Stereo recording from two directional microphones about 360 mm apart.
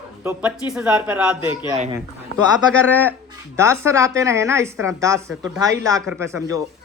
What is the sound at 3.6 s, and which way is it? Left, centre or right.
A woman's voice, centre.